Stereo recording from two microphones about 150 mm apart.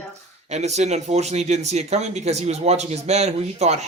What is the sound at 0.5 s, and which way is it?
A man's voice, 50° right (ahead or behind).